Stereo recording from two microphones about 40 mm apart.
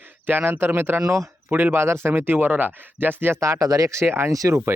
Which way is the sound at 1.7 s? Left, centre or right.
Right.